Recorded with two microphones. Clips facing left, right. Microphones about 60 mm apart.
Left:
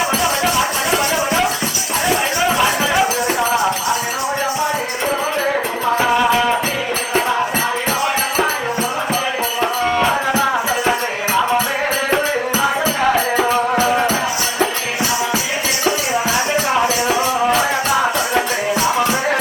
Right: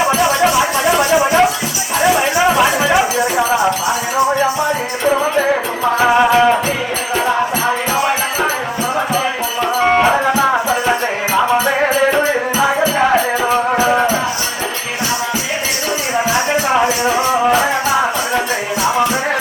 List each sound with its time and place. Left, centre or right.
0.0 s music: centre
6.1 s music: centre
10.1 s music: centre
13.4 s music: centre
17.2 s music: centre